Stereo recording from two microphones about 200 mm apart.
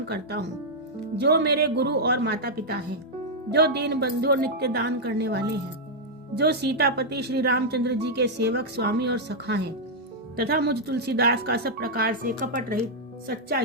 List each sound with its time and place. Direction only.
0.1 s speech: 55° right (ahead or behind)